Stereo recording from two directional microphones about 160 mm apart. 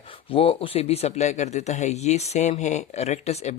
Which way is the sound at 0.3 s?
35° left (ahead or behind).